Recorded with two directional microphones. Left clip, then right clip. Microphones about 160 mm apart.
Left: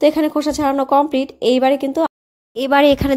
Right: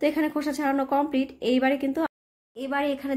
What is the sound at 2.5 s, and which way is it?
Speech, 50° left (ahead or behind).